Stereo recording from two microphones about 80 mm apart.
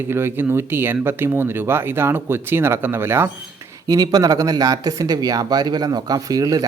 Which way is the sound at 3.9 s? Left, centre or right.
Right.